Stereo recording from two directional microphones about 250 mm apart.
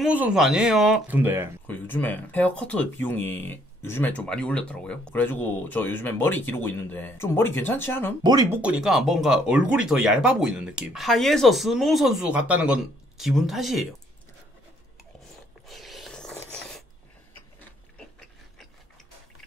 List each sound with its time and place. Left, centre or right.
0.0 s speech: centre
1.7 s speech: centre
8.2 s speech: centre
8.5 s speech: centre
15.7 s a sound: centre
17.9 s a sound: centre